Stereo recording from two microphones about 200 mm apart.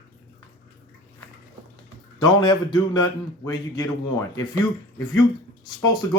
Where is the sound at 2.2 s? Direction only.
20° left (ahead or behind).